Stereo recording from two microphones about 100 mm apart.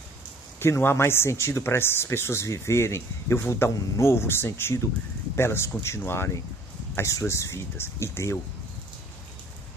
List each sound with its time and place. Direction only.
0.6 s speech: 25° left (ahead or behind)